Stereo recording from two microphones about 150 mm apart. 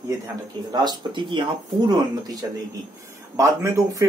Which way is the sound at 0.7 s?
30° right (ahead or behind).